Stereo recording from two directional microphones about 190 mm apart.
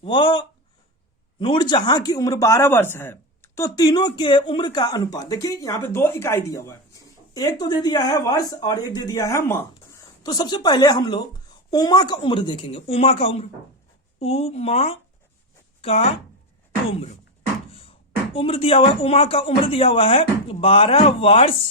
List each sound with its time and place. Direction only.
0.0 s speech: 25° left (ahead or behind)
17.7 s beatboxing: 30° left (ahead or behind)
18.3 s speech: 30° left (ahead or behind)